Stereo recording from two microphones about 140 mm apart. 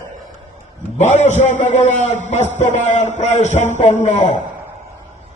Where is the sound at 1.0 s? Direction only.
55° left (ahead or behind).